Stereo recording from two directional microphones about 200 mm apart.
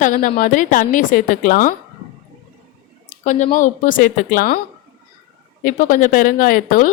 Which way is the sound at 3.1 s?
35° left (ahead or behind).